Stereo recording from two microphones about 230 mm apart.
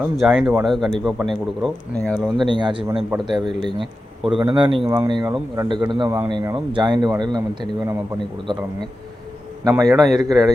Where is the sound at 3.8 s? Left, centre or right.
Centre.